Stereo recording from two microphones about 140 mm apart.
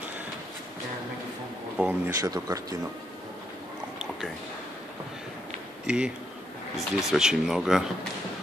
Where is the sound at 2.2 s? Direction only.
25° right (ahead or behind).